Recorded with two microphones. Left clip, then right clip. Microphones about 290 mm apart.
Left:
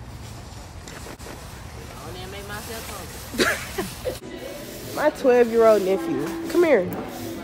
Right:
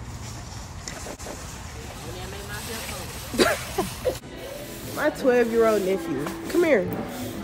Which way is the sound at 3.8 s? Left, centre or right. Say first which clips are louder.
Right 3 dB; right.